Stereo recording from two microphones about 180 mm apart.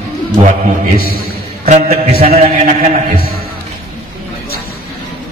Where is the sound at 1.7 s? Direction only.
35° right (ahead or behind).